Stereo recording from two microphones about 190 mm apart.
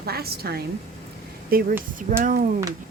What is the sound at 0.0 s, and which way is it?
A woman's voice, 55° right (ahead or behind).